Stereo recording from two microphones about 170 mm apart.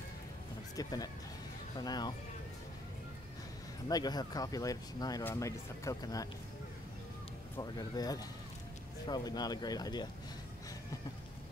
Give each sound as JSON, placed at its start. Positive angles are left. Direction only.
{"t": 0.7, "sound": "speech", "side_deg": 20}
{"t": 3.9, "sound": "speech", "side_deg": 25}
{"t": 7.5, "sound": "speech", "side_deg": 20}